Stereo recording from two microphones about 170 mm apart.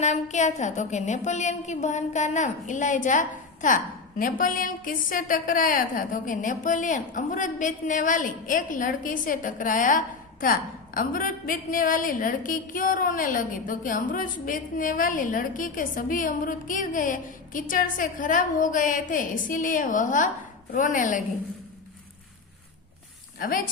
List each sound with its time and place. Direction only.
0.0 s a woman's voice: 45° left (ahead or behind)
23.4 s a woman's voice: 55° left (ahead or behind)